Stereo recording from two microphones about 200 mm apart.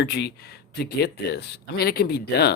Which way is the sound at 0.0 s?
55° left (ahead or behind).